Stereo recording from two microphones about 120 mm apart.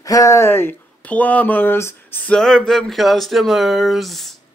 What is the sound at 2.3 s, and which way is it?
Speech, 5° left (ahead or behind).